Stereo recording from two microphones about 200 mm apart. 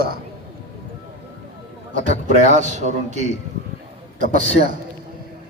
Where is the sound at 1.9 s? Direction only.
40° right (ahead or behind).